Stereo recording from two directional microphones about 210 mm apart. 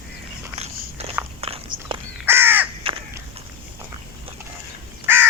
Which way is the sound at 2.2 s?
10° right (ahead or behind).